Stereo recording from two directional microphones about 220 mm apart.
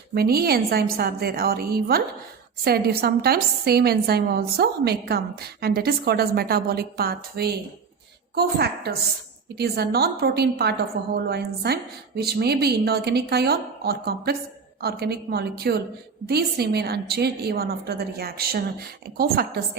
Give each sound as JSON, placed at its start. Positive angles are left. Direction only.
{"t": 0.1, "sound": "a woman's voice", "side_deg": -45}